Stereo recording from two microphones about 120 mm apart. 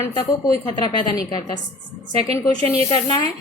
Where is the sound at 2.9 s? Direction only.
30° left (ahead or behind).